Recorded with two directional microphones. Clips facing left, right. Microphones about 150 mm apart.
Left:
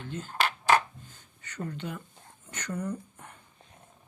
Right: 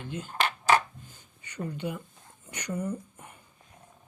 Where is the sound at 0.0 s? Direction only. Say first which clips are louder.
Right 1 dB; 10° right (ahead or behind).